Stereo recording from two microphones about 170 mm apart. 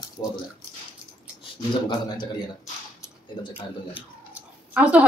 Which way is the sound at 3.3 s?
30° left (ahead or behind).